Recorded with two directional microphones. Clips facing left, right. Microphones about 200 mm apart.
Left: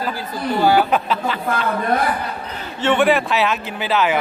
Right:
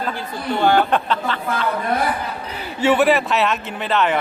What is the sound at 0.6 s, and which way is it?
Speech, 5° left (ahead or behind).